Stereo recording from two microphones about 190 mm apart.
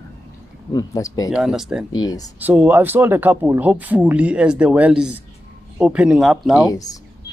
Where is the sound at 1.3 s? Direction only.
Centre (ahead or behind).